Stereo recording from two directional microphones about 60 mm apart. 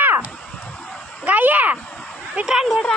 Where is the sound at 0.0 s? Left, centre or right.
Right.